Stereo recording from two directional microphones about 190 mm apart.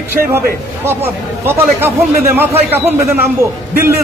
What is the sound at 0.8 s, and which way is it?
Speech, 10° right (ahead or behind).